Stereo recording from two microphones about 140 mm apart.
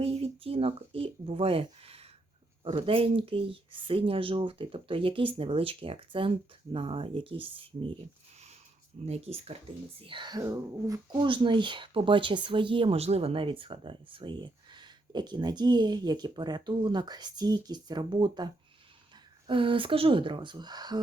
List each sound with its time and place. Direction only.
0.0 s speech: 45° right (ahead or behind)
9.0 s speech: 50° right (ahead or behind)
10.0 s speech: 35° right (ahead or behind)